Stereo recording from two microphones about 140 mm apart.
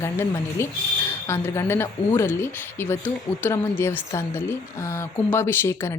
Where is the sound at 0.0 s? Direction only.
20° left (ahead or behind).